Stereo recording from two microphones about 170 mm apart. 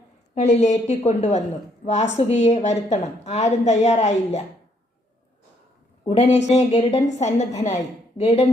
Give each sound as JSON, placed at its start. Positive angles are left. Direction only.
{"t": 0.3, "sound": "a woman's voice", "side_deg": 40}
{"t": 6.1, "sound": "a woman's voice", "side_deg": 40}